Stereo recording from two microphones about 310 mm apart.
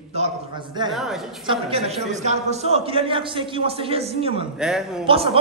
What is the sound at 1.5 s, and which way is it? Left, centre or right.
A man's voice, centre.